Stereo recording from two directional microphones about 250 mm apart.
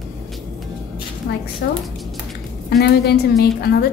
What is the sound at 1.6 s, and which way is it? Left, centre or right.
Speech, left.